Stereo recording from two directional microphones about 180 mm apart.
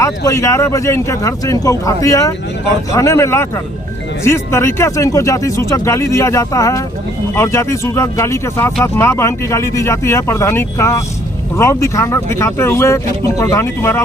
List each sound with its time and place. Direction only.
0.3 s speech: 15° left (ahead or behind)